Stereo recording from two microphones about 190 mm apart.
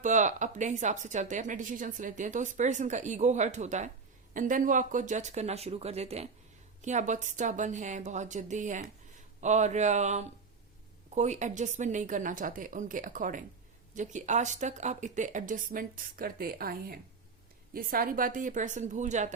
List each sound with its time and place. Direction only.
0.0 s a woman's voice: 40° right (ahead or behind)